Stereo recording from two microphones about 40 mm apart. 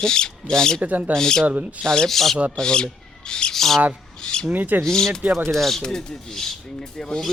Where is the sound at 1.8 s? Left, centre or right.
Centre.